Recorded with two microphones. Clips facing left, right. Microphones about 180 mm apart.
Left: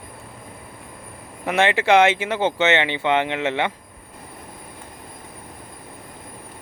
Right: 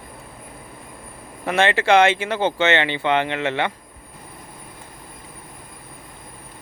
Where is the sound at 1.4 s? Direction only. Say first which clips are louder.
Even; 15° left (ahead or behind).